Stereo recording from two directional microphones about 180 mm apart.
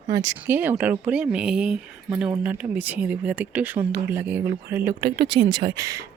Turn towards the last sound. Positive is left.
turn(degrees=-20)  # may be behind; listen again after turning